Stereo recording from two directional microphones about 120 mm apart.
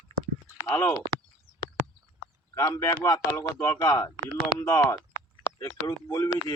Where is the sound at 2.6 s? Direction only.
25° left (ahead or behind).